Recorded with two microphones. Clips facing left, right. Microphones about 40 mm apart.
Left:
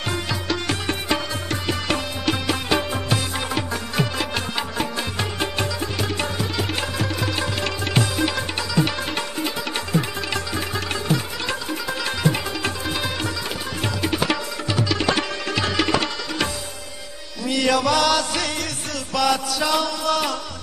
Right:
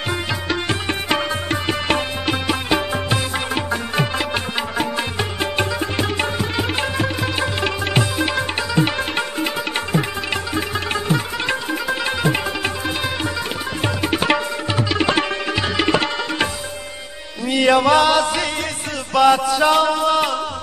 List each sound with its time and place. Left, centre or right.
0.1 s music: right
13.8 s tabla: right
17.5 s music: right
20.1 s music: right